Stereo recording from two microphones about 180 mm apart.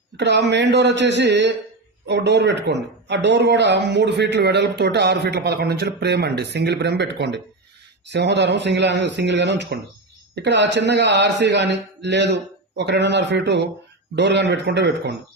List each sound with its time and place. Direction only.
0.2 s speech: 75° right (ahead or behind)